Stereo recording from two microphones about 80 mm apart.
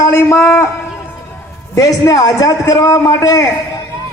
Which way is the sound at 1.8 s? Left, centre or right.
Left.